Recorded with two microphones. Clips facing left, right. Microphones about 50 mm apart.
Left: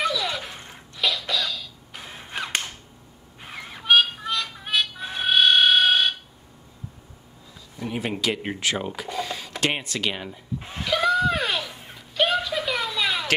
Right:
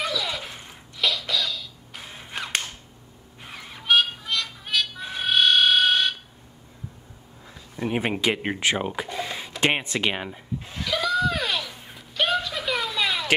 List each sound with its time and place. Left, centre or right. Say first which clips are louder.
0.0 s a sound: left 3 dB; centre
2.0 s mechanisms: left 2 dB; centre
3.5 s honk: left 2 dB; centre
4.3 s music: left 1 dB; centre
7.7 s speech: right 3 dB; right
10.6 s snicker: left 4 dB; left
11.9 s a sound: left 2 dB; centre